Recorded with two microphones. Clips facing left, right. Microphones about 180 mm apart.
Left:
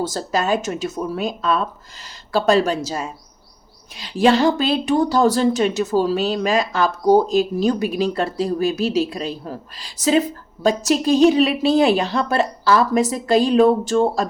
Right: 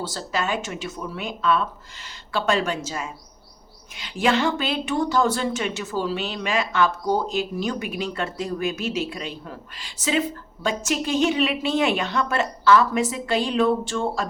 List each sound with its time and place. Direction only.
0.0 s speech: 40° left (ahead or behind)